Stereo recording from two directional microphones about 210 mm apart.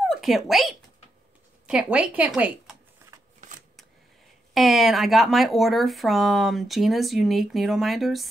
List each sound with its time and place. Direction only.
0.0 s speech: centre (ahead or behind)
3.3 s shuffling cards: 40° right (ahead or behind)
4.6 s speech: centre (ahead or behind)